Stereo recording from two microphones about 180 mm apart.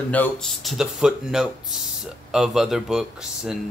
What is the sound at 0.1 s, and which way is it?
Speech, 5° left (ahead or behind).